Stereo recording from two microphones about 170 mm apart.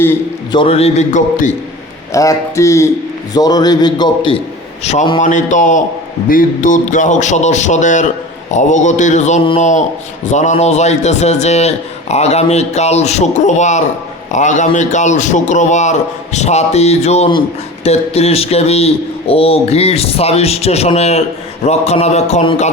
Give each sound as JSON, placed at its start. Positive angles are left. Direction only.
{"t": 0.5, "sound": "a man's voice", "side_deg": 35}
{"t": 2.1, "sound": "a man's voice", "side_deg": 20}
{"t": 4.8, "sound": "a man's voice", "side_deg": 40}
{"t": 5.2, "sound": "a man's voice", "side_deg": 45}